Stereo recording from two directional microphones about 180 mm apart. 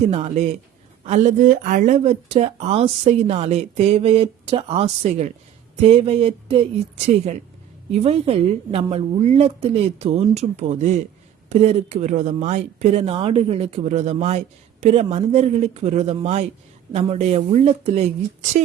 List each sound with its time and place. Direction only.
0.1 s speech: 35° right (ahead or behind)
7.9 s speech: 35° right (ahead or behind)